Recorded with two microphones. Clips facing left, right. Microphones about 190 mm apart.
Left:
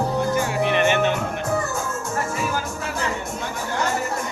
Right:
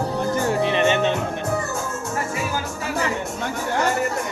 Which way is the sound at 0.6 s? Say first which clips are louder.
Left 1 dB; 20° right (ahead or behind).